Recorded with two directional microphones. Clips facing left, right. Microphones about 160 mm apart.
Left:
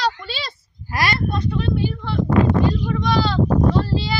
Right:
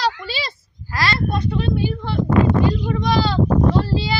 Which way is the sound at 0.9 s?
15° left (ahead or behind).